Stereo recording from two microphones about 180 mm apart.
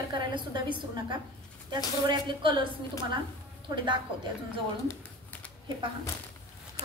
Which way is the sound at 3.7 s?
25° right (ahead or behind).